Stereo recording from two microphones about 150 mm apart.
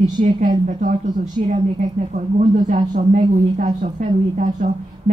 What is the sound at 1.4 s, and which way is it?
A woman's voice, 45° right (ahead or behind).